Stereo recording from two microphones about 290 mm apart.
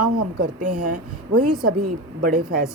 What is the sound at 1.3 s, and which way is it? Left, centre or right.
Speech, right.